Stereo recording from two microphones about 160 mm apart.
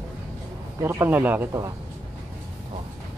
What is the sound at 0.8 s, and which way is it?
Speech, 15° right (ahead or behind).